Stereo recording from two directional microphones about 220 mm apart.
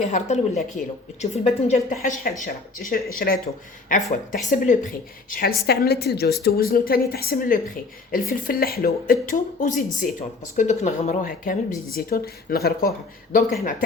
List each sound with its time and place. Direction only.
0.0 s speech: 30° left (ahead or behind)
2.0 s speech: 40° left (ahead or behind)